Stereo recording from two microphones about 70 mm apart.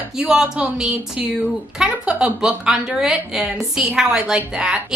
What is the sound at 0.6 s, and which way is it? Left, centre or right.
A woman's voice, centre.